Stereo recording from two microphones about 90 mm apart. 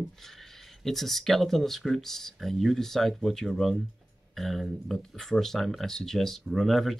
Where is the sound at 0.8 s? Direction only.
Centre (ahead or behind).